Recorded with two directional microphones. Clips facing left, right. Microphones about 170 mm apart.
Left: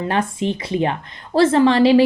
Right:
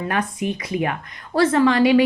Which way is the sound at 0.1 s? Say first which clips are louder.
Left 3 dB; 25° left (ahead or behind).